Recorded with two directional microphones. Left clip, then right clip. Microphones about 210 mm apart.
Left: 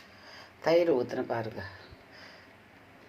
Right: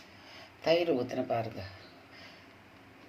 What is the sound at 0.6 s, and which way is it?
Speech, 15° left (ahead or behind).